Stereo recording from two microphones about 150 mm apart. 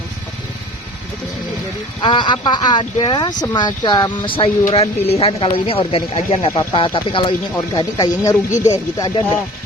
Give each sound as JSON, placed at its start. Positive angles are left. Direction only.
{"t": 2.0, "sound": "speech", "side_deg": 30}
{"t": 4.3, "sound": "speech", "side_deg": 40}